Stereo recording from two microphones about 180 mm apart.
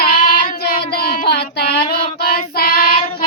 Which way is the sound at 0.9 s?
55° left (ahead or behind).